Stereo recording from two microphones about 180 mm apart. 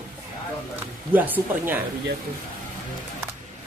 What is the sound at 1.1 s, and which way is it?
Speech, 10° right (ahead or behind).